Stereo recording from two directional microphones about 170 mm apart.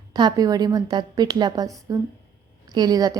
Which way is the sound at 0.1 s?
25° right (ahead or behind).